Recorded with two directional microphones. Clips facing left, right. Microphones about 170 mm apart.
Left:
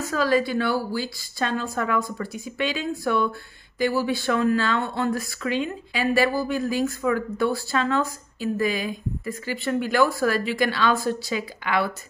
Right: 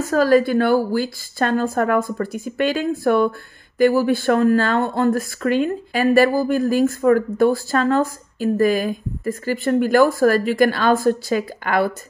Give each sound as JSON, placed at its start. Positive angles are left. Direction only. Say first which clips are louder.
{"t": 0.1, "sound": "a woman's voice", "louder": "right 7 dB", "side_deg": -45}